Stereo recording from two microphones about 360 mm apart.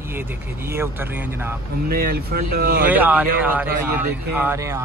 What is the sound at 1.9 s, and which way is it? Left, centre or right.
Speech, right.